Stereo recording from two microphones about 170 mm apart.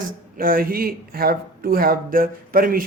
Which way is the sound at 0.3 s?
55° right (ahead or behind).